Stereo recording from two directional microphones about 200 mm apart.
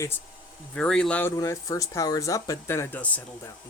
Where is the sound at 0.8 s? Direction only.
5° left (ahead or behind).